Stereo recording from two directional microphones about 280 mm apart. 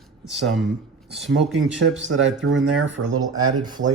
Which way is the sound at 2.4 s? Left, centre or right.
Right.